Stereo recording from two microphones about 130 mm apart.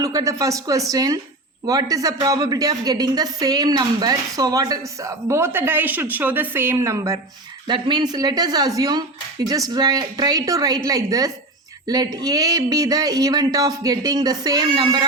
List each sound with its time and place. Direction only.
0.0 s a woman's voice: 25° right (ahead or behind)
7.7 s a woman's voice: 35° right (ahead or behind)